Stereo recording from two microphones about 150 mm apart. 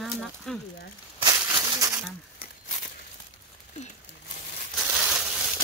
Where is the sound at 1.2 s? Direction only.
20° right (ahead or behind).